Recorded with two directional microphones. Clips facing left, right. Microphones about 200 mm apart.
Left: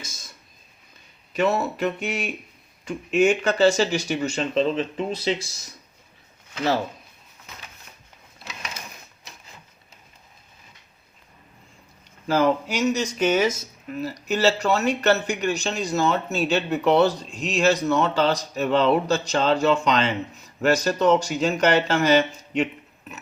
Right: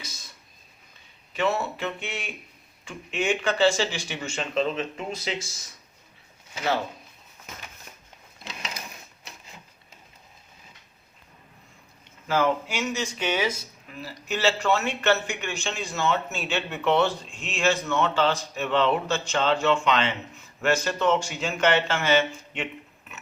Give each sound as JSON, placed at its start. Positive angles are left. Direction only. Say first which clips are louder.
{"t": 0.0, "sound": "a sound", "louder": "left 2 dB", "side_deg": 45}
{"t": 1.3, "sound": "speech", "louder": "left 4 dB", "side_deg": 40}
{"t": 12.3, "sound": "speech", "louder": "left 4 dB", "side_deg": 40}